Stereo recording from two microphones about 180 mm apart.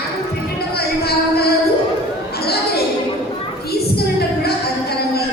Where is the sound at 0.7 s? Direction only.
60° left (ahead or behind).